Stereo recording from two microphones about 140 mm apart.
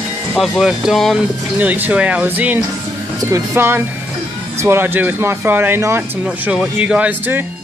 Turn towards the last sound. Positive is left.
turn(degrees=-10)  # may be behind; listen again after turning